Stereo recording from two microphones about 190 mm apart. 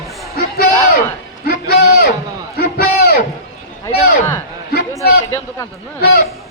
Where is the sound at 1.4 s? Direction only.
55° left (ahead or behind).